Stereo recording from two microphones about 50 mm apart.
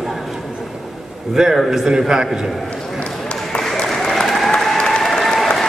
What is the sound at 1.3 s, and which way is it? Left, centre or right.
Speech, centre.